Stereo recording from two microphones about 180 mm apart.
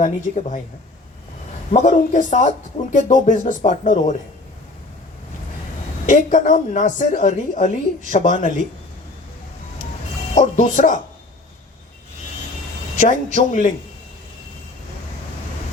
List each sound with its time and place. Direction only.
0.0 s a woman's voice: 45° left (ahead or behind)
1.7 s a woman's voice: 45° left (ahead or behind)
6.1 s a woman's voice: 45° left (ahead or behind)
10.3 s a woman's voice: 45° left (ahead or behind)
13.0 s a woman's voice: 45° left (ahead or behind)